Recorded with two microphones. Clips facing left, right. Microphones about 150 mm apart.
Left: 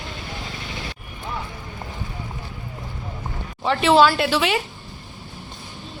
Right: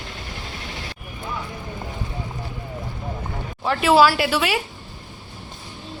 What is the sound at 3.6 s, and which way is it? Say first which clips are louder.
Speech: even; 5° right (ahead or behind).